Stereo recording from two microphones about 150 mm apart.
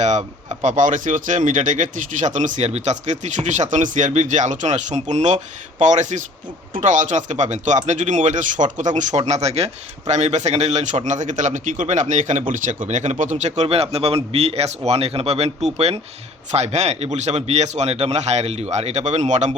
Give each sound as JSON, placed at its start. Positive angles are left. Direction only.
{"t": 0.0, "sound": "speech", "side_deg": -50}
{"t": 13.3, "sound": "speech", "side_deg": -45}